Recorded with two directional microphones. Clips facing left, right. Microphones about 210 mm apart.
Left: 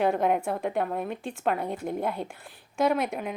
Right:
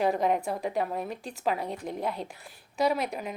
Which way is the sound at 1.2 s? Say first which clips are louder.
Left 4 dB; 40° right (ahead or behind).